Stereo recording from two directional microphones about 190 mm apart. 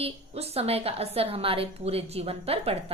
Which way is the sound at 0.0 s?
30° right (ahead or behind).